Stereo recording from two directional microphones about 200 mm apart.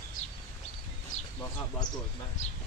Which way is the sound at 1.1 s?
40° left (ahead or behind).